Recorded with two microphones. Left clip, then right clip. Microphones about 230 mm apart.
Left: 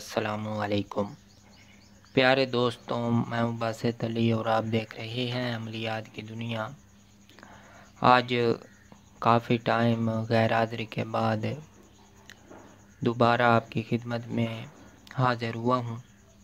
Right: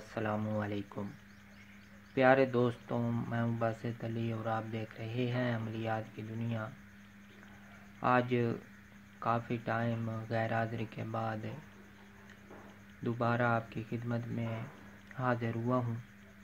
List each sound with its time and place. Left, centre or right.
0.0 s speech: left
2.1 s speech: left
8.0 s speech: left
13.0 s speech: left